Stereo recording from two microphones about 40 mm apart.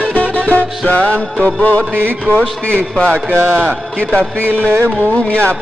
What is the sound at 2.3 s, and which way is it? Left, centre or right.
Speech, left.